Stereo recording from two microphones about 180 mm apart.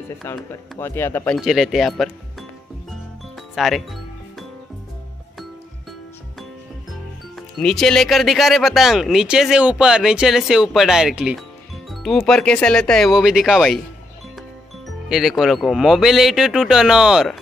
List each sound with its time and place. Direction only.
0.2 s speech: 15° left (ahead or behind)
1.4 s speech: centre (ahead or behind)
3.5 s music: centre (ahead or behind)
7.3 s speech: centre (ahead or behind)
15.0 s speech: centre (ahead or behind)